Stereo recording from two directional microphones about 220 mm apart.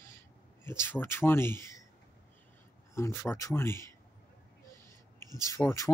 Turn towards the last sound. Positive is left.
turn(degrees=15)  # may be behind; listen again after turning